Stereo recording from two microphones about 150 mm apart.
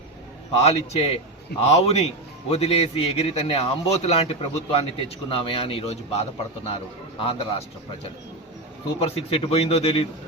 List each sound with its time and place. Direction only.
0.6 s a man's voice: 40° left (ahead or behind)
9.0 s a man's voice: 40° left (ahead or behind)